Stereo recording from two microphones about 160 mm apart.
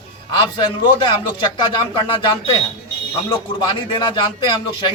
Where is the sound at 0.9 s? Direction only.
30° left (ahead or behind).